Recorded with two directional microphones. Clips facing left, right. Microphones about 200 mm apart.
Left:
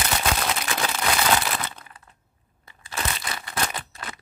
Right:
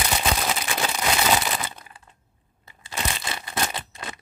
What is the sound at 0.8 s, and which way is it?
Crumpling, 10° right (ahead or behind).